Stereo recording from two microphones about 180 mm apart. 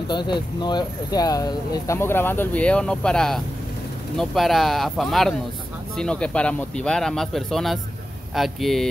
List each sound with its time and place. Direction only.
0.1 s speech: 25° left (ahead or behind); by 8.8 s centre (ahead or behind)